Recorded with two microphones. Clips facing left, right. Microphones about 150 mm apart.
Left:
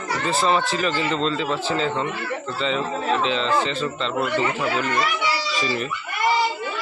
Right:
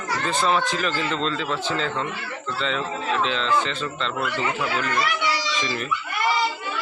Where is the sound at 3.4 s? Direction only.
35° left (ahead or behind).